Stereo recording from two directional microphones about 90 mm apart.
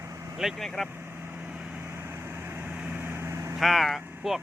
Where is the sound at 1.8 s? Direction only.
25° right (ahead or behind).